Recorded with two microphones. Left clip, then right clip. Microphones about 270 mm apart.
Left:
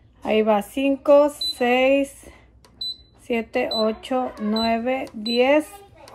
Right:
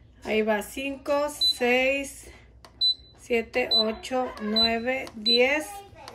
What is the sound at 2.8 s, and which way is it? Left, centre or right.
Cash register, centre.